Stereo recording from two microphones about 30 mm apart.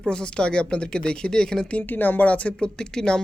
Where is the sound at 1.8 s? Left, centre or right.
Left.